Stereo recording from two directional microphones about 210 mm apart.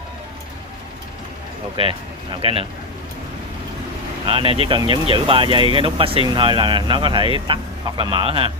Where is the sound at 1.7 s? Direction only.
25° right (ahead or behind).